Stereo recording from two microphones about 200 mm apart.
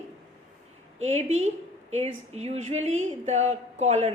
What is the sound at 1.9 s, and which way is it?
Speech, 35° right (ahead or behind).